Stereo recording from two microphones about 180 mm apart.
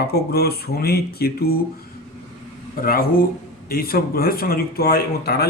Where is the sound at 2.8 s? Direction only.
55° left (ahead or behind).